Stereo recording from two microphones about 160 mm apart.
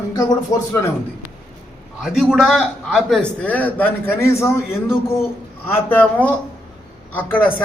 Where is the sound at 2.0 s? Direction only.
Centre (ahead or behind).